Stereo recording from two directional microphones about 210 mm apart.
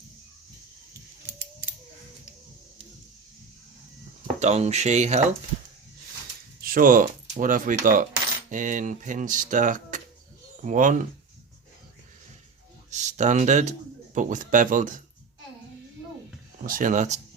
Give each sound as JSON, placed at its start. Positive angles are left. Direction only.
{"t": 4.4, "sound": "speech", "side_deg": -30}
{"t": 6.6, "sound": "speech", "side_deg": -45}
{"t": 12.9, "sound": "speech", "side_deg": -35}
{"t": 16.6, "sound": "speech", "side_deg": -40}